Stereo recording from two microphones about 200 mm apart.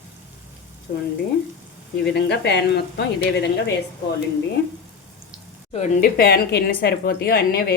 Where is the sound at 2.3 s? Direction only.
55° left (ahead or behind).